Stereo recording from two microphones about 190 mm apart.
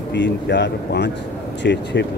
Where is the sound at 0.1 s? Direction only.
65° left (ahead or behind).